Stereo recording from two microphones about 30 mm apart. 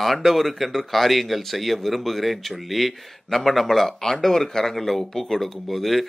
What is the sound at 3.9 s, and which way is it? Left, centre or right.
Speech, left.